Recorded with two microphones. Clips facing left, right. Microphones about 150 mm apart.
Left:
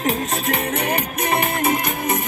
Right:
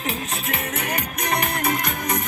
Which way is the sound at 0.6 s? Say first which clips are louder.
Left 5 dB; 30° left (ahead or behind).